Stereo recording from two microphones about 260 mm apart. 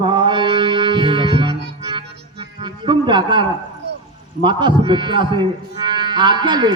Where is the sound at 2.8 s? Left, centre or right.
Centre.